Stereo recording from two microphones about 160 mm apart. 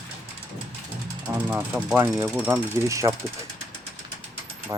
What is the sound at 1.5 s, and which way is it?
Speech, 10° right (ahead or behind).